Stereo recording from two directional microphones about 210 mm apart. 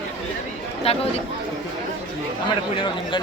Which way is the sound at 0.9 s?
30° left (ahead or behind).